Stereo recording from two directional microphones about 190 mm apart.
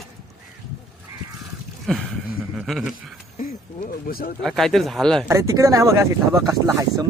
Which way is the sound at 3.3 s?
45° left (ahead or behind).